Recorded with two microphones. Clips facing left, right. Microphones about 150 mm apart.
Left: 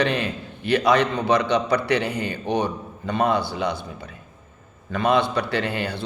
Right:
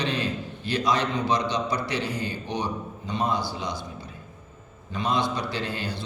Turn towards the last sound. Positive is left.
turn(degrees=60)  # may be behind; listen again after turning